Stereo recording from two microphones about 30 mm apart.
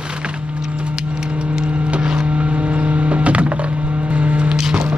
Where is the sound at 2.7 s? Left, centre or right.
Right.